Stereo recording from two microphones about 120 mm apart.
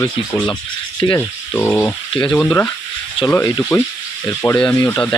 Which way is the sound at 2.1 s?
40° left (ahead or behind).